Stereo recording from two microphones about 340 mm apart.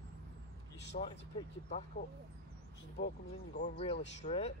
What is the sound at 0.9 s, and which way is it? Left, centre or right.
Speech, left.